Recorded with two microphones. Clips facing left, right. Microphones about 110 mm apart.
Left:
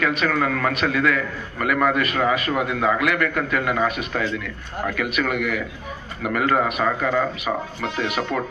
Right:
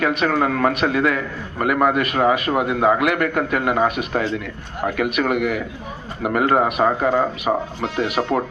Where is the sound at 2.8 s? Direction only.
45° right (ahead or behind).